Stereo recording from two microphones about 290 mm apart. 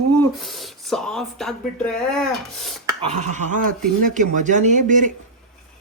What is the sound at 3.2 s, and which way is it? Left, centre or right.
Speech, right.